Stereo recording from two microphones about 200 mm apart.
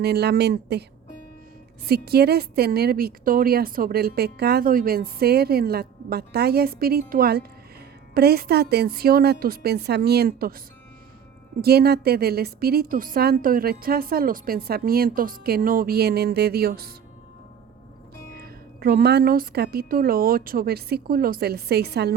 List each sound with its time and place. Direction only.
0.0 s speech: 55° right (ahead or behind)
1.9 s a woman's voice: 50° right (ahead or behind)
11.6 s a woman's voice: 50° right (ahead or behind)
18.3 s a woman's voice: 50° right (ahead or behind)